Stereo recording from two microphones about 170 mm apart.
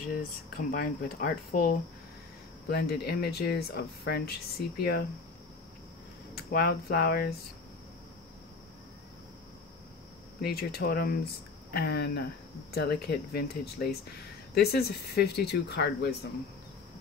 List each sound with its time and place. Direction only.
0.1 s speech: 60° left (ahead or behind)
6.3 s speech: 65° left (ahead or behind)
10.4 s speech: 65° left (ahead or behind)